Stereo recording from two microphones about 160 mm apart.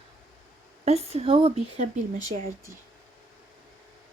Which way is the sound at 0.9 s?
40° right (ahead or behind).